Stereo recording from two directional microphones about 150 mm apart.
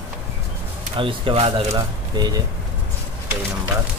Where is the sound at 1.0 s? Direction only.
35° right (ahead or behind).